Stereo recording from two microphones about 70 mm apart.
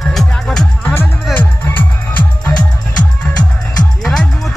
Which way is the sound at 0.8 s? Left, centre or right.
Left.